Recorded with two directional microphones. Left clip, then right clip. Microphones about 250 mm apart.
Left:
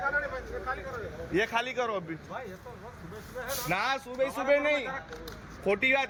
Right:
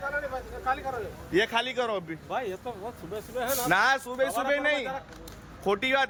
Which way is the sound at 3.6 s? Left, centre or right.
Centre.